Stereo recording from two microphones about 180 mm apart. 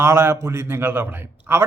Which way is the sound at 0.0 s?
15° right (ahead or behind).